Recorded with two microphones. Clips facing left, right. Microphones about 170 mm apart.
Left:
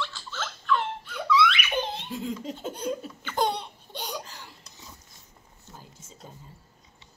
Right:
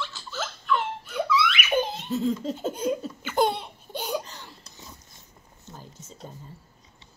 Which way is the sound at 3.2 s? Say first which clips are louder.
Right 3 dB; 5° right (ahead or behind).